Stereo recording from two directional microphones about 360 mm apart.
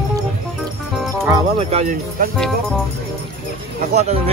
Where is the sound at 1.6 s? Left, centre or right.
Centre.